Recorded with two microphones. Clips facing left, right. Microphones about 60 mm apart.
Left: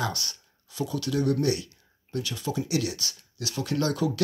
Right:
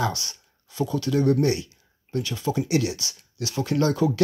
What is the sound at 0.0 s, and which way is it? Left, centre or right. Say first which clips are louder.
Speech: right 4 dB; right.